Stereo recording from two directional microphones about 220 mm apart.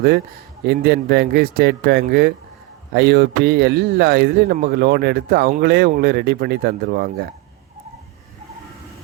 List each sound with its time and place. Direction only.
0.7 s speech: 50° right (ahead or behind)